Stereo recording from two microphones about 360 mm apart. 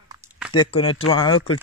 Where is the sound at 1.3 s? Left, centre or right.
Left.